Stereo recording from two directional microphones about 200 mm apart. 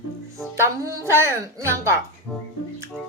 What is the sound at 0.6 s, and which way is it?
Speech, 15° right (ahead or behind).